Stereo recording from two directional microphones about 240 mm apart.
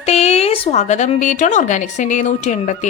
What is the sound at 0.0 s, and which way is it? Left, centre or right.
Speech, left.